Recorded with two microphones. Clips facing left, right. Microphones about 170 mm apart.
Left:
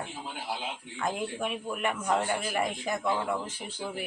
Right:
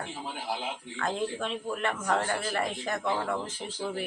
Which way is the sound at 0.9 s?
15° left (ahead or behind).